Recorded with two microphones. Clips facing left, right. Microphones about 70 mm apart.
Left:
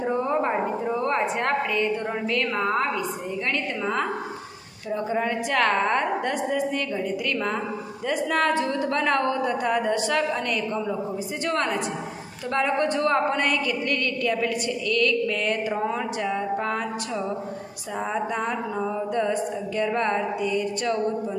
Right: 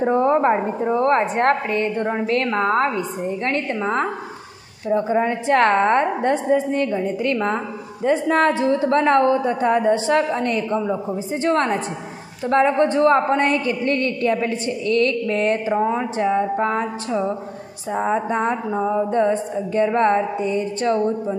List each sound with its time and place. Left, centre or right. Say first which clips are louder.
0.0 s a woman's voice: right 7 dB; right